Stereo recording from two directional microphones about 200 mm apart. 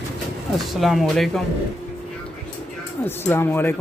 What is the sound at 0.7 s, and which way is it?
Speech, centre (ahead or behind).